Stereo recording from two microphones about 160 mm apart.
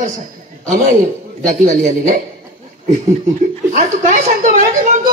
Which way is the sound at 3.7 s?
55° right (ahead or behind).